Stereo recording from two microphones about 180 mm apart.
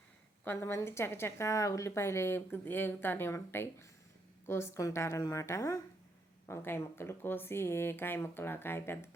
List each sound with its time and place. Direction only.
0.4 s a woman's voice: 15° left (ahead or behind)